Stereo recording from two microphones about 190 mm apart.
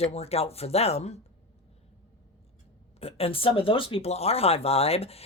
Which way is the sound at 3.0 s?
30° left (ahead or behind).